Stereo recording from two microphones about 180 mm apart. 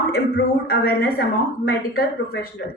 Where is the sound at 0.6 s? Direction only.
60° left (ahead or behind).